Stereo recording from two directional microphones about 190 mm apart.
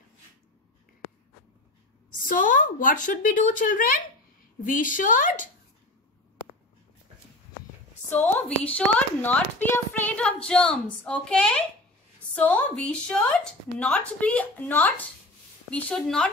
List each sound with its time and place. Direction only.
2.2 s a woman's voice: 45° left (ahead or behind)
8.2 s a woman's voice: 5° left (ahead or behind)